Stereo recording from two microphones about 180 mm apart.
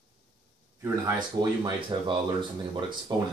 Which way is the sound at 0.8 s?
20° right (ahead or behind).